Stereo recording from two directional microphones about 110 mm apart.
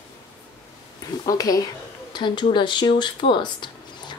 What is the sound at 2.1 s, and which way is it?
Speech, 45° left (ahead or behind).